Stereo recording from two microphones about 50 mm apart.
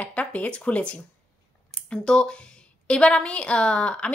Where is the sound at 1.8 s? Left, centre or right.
Centre.